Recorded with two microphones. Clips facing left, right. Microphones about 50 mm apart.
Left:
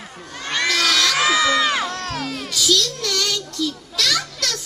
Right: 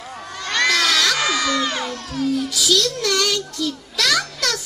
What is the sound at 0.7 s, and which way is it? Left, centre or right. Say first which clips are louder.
Crowd: left 1 dB; centre.